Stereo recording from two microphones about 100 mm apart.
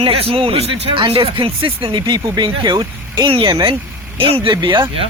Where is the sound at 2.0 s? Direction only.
45° right (ahead or behind).